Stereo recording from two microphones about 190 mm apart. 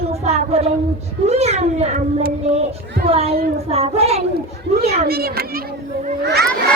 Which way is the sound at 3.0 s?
30° right (ahead or behind).